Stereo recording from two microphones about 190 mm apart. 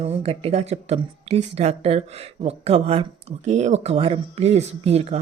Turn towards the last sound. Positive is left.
turn(degrees=-35)  # may be behind; listen again after turning